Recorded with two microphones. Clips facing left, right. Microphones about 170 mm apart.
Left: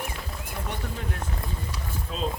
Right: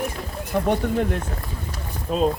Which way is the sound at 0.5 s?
75° right (ahead or behind).